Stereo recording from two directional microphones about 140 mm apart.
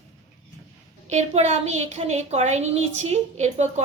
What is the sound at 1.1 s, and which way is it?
A woman's voice, 55° right (ahead or behind).